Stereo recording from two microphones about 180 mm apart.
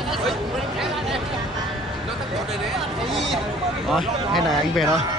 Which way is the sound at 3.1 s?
Centre (ahead or behind).